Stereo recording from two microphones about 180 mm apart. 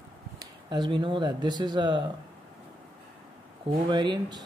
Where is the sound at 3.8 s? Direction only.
25° right (ahead or behind).